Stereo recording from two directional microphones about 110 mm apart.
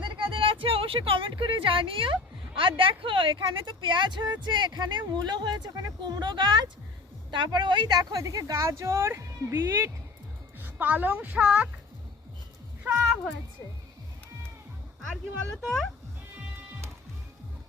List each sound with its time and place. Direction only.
0.0 s a sound: 50° right (ahead or behind)
2.6 s a woman's voice: 55° right (ahead or behind); by 11.7 s 10° right (ahead or behind)
15.6 s speech: centre (ahead or behind)